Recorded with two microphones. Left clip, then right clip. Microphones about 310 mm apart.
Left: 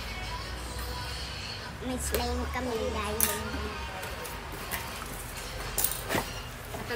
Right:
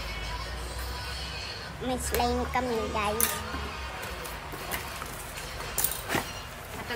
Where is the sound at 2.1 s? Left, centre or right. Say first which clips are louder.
Right 5 dB; right.